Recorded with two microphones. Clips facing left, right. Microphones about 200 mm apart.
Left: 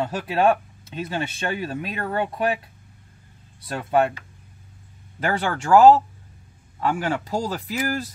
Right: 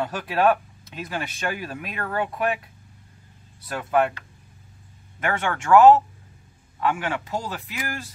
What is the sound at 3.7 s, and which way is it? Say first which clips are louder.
Speech: left 1 dB; 30° left (ahead or behind).